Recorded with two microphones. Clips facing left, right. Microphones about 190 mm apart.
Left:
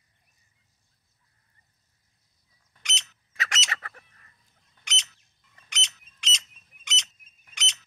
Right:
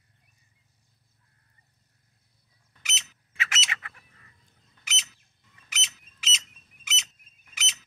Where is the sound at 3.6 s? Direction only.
40° left (ahead or behind).